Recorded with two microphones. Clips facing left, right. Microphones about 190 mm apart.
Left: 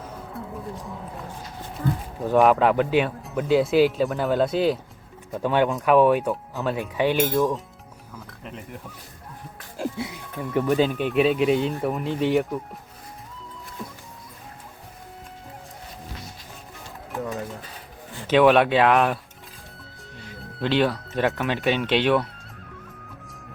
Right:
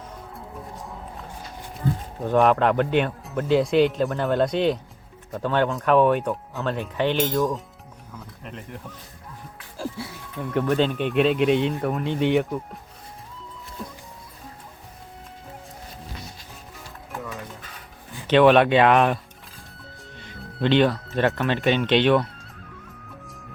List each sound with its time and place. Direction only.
2.2 s speech: 5° left (ahead or behind)
9.7 s music: 20° left (ahead or behind)
10.4 s speech: 5° left (ahead or behind)
17.2 s dishes: 40° left (ahead or behind)
18.3 s speech: 5° left (ahead or behind)